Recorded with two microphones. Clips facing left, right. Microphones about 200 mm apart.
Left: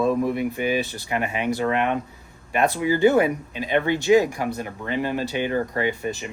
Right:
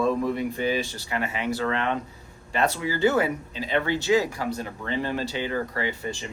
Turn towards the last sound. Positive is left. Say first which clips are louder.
# left 5 dB
turn(degrees=20)  # may be behind; listen again after turning